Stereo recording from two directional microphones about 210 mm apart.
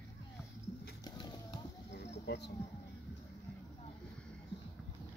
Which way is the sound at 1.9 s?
55° left (ahead or behind).